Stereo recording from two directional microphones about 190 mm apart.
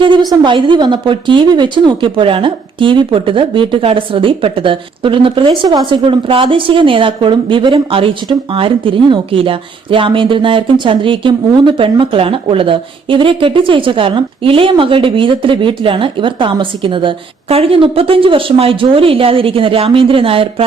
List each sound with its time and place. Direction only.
0.0 s speech: 25° right (ahead or behind)